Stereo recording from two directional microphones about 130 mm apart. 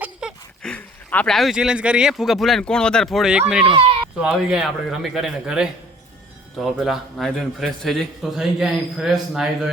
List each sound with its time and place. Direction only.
0.0 s a sound: 5° right (ahead or behind)
0.6 s speech: 10° left (ahead or behind)
3.7 s speech: 45° right (ahead or behind)
4.2 s speech: 5° right (ahead or behind)
6.7 s speech: centre (ahead or behind)